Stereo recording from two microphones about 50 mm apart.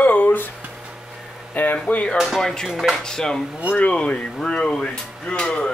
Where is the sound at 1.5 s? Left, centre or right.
Left.